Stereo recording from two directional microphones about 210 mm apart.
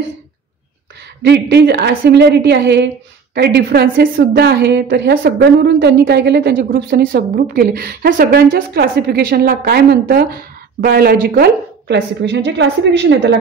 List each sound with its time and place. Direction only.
1.0 s a woman's voice: 55° right (ahead or behind)